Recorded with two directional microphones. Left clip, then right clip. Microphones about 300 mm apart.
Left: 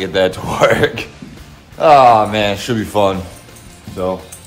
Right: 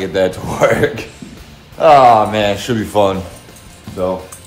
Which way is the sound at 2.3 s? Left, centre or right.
Centre.